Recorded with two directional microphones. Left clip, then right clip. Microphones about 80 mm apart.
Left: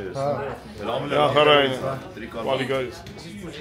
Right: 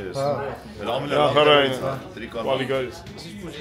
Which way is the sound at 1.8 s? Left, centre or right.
Right.